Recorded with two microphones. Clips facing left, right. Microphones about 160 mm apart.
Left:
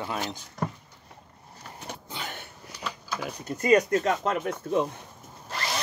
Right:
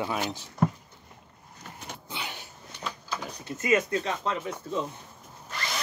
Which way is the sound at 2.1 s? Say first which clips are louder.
Right 1 dB; 45° left (ahead or behind).